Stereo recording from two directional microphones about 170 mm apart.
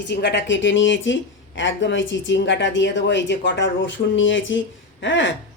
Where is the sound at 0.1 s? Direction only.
90° left.